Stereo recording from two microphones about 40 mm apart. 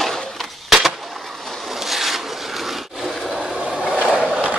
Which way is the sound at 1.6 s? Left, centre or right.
Centre.